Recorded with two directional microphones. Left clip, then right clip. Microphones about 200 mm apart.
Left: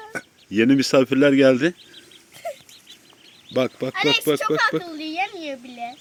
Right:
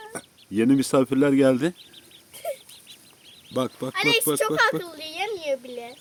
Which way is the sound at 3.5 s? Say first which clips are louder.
Left 5 dB; centre (ahead or behind).